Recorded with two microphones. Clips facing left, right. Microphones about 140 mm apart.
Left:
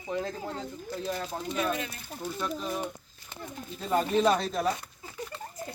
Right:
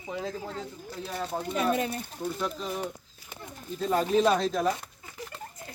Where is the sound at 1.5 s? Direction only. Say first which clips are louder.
Right 4 dB; 45° right (ahead or behind).